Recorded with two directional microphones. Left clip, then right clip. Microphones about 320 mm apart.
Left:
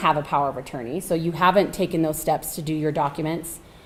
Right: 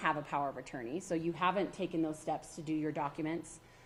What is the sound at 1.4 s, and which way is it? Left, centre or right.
A woman's voice, left.